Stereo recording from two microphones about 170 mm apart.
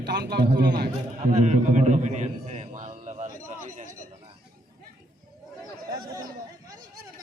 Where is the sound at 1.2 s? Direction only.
40° right (ahead or behind).